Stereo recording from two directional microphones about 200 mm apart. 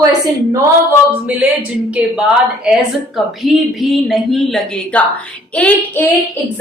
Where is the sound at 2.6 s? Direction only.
Centre (ahead or behind).